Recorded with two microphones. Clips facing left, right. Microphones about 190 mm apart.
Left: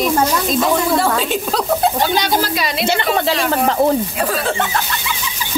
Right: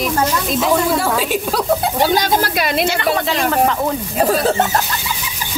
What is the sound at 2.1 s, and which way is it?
Speech, 55° right (ahead or behind).